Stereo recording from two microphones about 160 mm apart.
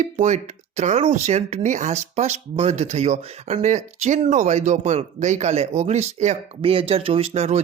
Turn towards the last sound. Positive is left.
turn(degrees=-40)  # may be behind; listen again after turning